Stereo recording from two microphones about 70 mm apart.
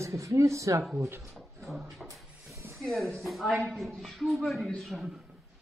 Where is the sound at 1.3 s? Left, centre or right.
Centre.